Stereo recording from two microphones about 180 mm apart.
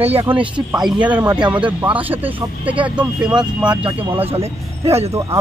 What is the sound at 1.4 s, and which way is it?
Speech, 25° right (ahead or behind).